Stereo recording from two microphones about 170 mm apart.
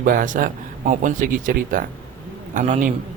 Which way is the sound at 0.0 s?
55° right (ahead or behind).